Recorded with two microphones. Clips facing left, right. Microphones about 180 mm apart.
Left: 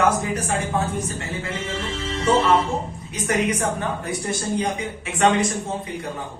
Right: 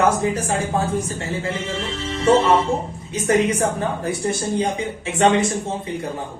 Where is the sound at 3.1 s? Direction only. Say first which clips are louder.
Right 5 dB; 30° right (ahead or behind).